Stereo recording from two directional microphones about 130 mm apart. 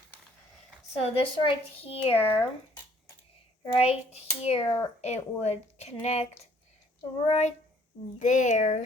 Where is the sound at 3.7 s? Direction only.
50° left (ahead or behind).